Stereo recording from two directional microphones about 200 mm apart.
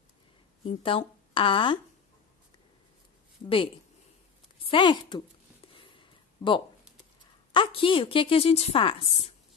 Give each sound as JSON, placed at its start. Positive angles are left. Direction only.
{"t": 0.8, "sound": "a woman's voice", "side_deg": 25}
{"t": 3.4, "sound": "a woman's voice", "side_deg": 25}
{"t": 5.8, "sound": "a sound", "side_deg": 25}
{"t": 7.5, "sound": "a woman's voice", "side_deg": 25}